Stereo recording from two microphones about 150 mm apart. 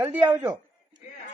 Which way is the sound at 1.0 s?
50° left (ahead or behind).